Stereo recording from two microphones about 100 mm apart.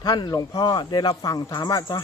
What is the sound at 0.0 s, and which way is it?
Speech, 40° left (ahead or behind).